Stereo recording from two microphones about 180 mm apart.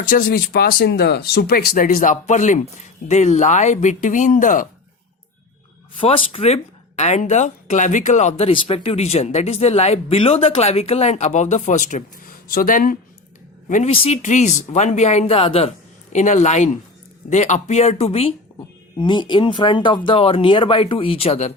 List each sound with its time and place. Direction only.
0.0 s speech: 50° left (ahead or behind)
6.0 s speech: 30° left (ahead or behind)